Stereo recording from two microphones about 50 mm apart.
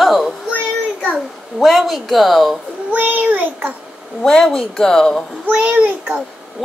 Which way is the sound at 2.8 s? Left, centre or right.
Right.